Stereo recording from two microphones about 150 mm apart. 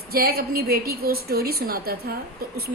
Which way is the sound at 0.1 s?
90° right.